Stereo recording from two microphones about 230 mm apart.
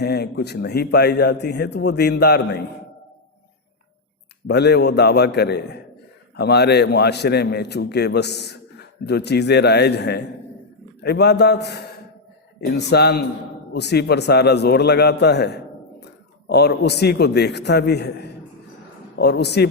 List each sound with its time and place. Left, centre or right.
0.0 s a man's voice: left
4.4 s a man's voice: left